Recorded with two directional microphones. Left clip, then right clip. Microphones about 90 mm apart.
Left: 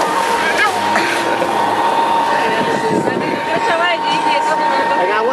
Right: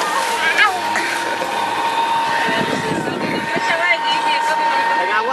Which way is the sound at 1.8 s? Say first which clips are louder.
Left 4 dB; 25° right (ahead or behind).